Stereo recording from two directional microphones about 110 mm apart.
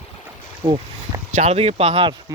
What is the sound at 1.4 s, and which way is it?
Speech, 70° right (ahead or behind).